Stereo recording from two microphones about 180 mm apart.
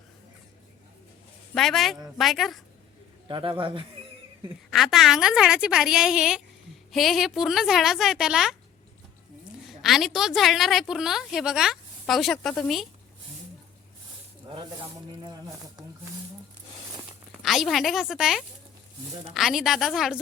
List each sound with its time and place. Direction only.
1.5 s a woman's voice: centre (ahead or behind)
3.2 s speech: 25° right (ahead or behind)
4.7 s a woman's voice: centre (ahead or behind)
9.8 s a woman's voice: centre (ahead or behind)
14.4 s a sound: 25° right (ahead or behind)
17.4 s a woman's voice: centre (ahead or behind)